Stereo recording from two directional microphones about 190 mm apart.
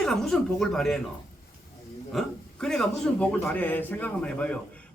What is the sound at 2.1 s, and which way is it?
A man's voice, 5° left (ahead or behind).